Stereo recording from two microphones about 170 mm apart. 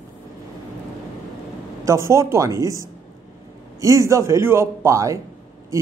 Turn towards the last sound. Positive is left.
turn(degrees=-20)  # may be behind; listen again after turning